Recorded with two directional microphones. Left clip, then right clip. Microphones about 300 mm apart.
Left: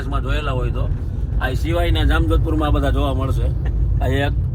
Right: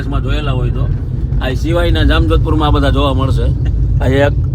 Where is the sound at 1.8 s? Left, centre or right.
Centre.